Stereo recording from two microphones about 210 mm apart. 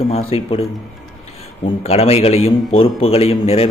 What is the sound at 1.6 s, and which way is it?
Speech, 30° left (ahead or behind).